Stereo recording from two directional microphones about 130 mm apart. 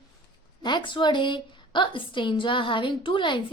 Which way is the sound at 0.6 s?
35° left (ahead or behind).